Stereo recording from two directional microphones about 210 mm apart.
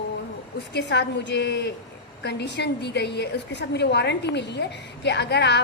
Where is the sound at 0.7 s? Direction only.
55° left (ahead or behind).